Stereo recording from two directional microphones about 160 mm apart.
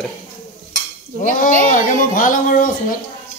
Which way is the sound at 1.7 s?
55° left (ahead or behind).